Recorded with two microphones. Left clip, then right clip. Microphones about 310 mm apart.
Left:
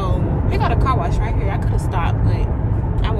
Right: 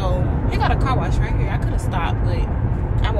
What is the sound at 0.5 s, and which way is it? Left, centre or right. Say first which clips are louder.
Speech: left 1 dB; centre.